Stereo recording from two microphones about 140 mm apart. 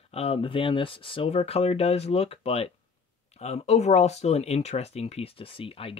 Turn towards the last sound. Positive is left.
turn(degrees=40)  # may be behind; listen again after turning